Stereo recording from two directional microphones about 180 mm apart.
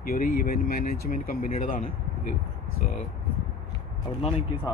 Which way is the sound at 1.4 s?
35° left (ahead or behind).